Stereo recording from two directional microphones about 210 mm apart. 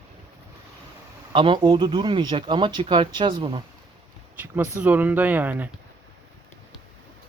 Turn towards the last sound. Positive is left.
turn(degrees=-10)  # may be behind; listen again after turning